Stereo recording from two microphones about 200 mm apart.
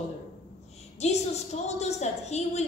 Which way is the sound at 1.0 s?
35° left (ahead or behind).